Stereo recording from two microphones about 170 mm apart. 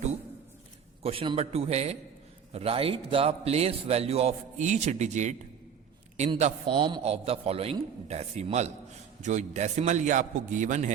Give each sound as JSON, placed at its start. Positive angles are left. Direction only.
{"t": 1.0, "sound": "a man's voice", "side_deg": -30}
{"t": 6.7, "sound": "a man's voice", "side_deg": -25}